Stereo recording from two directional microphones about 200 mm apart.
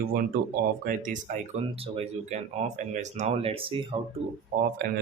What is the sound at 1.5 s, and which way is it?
Speech, 30° right (ahead or behind).